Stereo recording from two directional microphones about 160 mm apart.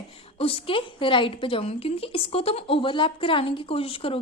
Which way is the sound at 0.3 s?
35° left (ahead or behind).